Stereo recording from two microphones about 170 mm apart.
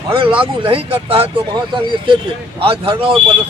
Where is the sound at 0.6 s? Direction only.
35° right (ahead or behind).